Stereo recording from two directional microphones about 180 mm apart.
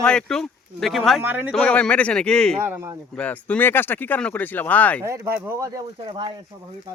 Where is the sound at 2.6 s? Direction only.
15° right (ahead or behind).